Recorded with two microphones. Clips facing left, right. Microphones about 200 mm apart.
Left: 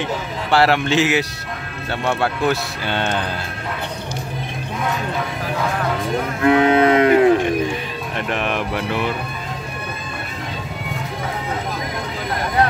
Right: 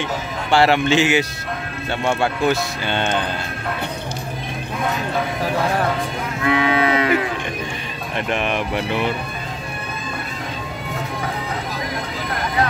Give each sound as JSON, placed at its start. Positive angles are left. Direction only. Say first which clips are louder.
{"t": 0.0, "sound": "speech", "louder": "left 1 dB", "side_deg": 0}
{"t": 6.4, "sound": "a sound", "louder": "left 5 dB", "side_deg": 50}
{"t": 8.3, "sound": "speech", "louder": "right 1 dB", "side_deg": 0}